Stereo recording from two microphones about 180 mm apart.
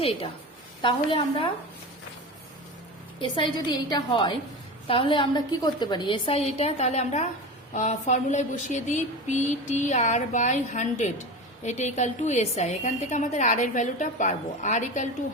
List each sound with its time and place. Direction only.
0.0 s a woman's voice: 30° left (ahead or behind)
3.2 s a woman's voice: 25° left (ahead or behind); by 15.0 s 45° left (ahead or behind)